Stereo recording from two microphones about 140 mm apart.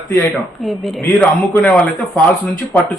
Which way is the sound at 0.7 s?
Centre (ahead or behind).